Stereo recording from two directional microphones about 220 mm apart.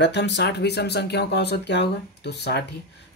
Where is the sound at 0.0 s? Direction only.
50° left (ahead or behind).